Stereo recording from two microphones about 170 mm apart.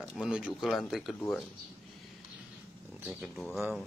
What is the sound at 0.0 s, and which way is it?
Speech, 5° right (ahead or behind).